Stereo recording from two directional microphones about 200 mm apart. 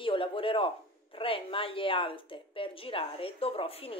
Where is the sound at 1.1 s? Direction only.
25° left (ahead or behind).